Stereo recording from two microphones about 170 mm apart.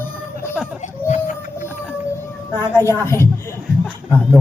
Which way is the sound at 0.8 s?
45° left (ahead or behind).